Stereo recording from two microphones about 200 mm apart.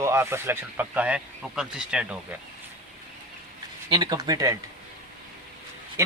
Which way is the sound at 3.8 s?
20° right (ahead or behind).